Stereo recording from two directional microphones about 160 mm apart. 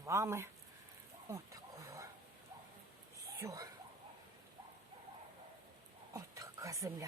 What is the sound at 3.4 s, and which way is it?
Speech, 20° right (ahead or behind).